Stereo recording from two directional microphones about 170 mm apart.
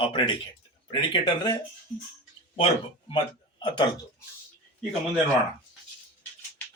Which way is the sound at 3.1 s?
30° left (ahead or behind).